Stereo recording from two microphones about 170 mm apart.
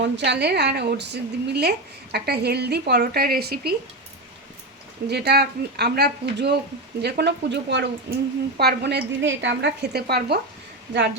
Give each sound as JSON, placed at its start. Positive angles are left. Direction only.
{"t": 0.0, "sound": "a woman's voice", "side_deg": -90}
{"t": 5.0, "sound": "a woman's voice", "side_deg": -70}
{"t": 7.0, "sound": "a woman's voice", "side_deg": -85}
{"t": 8.5, "sound": "a woman's voice", "side_deg": -75}